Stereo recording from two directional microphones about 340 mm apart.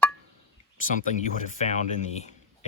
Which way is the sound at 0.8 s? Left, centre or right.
Left.